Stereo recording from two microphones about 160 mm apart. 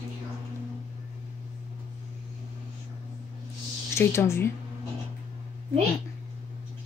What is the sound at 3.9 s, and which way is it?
Speech, 15° left (ahead or behind).